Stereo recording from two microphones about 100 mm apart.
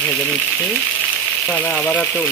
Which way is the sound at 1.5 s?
20° left (ahead or behind).